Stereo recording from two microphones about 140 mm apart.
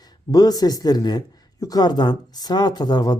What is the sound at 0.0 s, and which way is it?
Speech, 25° left (ahead or behind).